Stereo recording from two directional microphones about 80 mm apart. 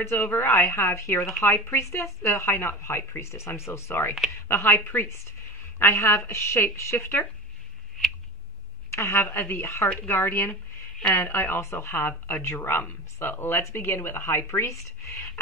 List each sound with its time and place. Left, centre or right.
0.0 s speech: left
8.9 s speech: left